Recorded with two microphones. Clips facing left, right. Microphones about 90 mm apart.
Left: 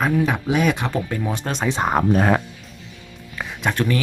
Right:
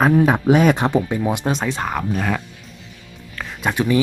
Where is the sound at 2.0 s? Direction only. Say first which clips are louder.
Left 5 dB; 40° left (ahead or behind).